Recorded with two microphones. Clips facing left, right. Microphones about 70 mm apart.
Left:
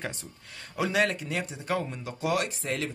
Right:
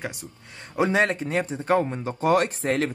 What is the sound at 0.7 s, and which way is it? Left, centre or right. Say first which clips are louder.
Speech: right 5 dB; right.